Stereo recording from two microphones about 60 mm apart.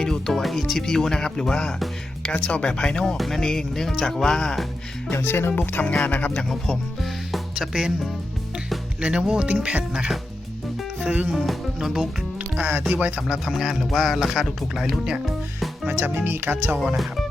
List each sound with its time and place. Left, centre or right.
0.0 s music: centre
0.4 s speech: centre
3.2 s speech: centre
5.1 s speech: left
5.5 s speech: left
6.5 s speech: centre
7.5 s speech: centre
9.0 s speech: centre
11.3 s speech: centre
12.5 s speech: right
13.1 s speech: centre
15.9 s speech: right